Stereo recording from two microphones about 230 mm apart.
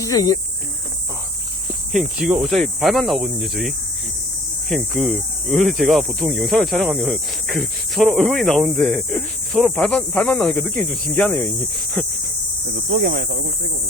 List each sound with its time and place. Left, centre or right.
0.0 s speech: centre
1.9 s speech: centre
4.7 s speech: centre
13.1 s speech: right